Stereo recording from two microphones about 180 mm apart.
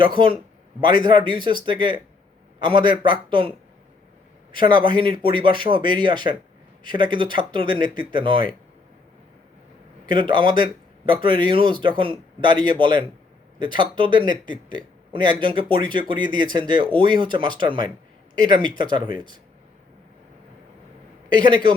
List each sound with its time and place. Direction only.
0.0 s speech: 25° right (ahead or behind)
4.7 s speech: 25° right (ahead or behind)
10.1 s speech: 25° right (ahead or behind)